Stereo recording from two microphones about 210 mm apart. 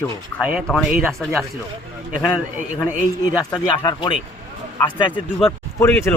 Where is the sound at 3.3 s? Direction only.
20° left (ahead or behind).